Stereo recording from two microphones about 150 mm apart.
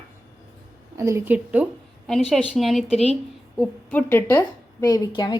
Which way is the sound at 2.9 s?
45° left (ahead or behind).